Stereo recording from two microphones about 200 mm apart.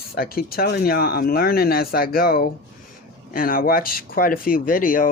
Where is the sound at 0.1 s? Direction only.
50° left (ahead or behind).